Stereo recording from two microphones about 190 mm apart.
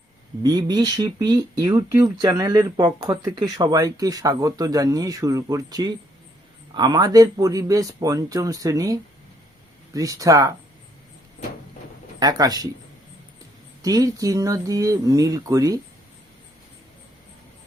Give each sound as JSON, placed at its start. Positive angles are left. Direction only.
{"t": 0.4, "sound": "speech", "side_deg": -20}
{"t": 12.2, "sound": "speech", "side_deg": -20}
{"t": 13.8, "sound": "speech", "side_deg": -20}